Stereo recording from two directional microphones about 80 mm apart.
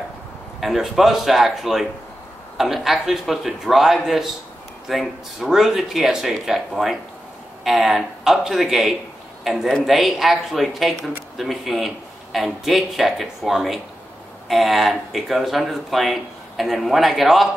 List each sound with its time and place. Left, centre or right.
0.6 s speech: centre